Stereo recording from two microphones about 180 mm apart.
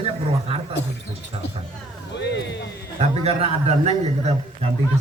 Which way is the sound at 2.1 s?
75° left (ahead or behind).